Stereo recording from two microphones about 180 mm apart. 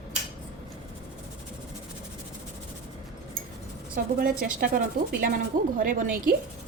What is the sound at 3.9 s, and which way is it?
Speech, 50° right (ahead or behind).